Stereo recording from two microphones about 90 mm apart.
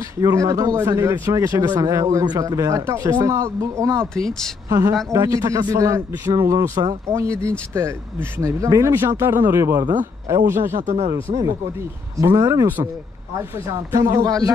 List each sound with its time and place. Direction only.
0.2 s speech: 35° right (ahead or behind)
4.0 s speech: 10° left (ahead or behind)
4.6 s speech: 40° right (ahead or behind)
7.1 s speech: 35° right (ahead or behind)
12.2 s speech: 35° right (ahead or behind)
13.7 s speech: 35° right (ahead or behind)